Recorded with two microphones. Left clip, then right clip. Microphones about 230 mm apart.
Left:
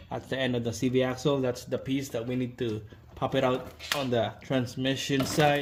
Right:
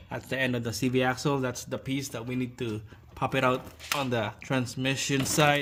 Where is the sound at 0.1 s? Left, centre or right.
Right.